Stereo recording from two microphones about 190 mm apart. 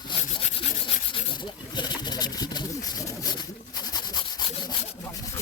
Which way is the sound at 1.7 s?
25° left (ahead or behind).